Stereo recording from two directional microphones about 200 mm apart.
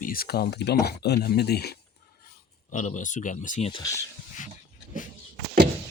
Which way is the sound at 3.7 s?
15° left (ahead or behind).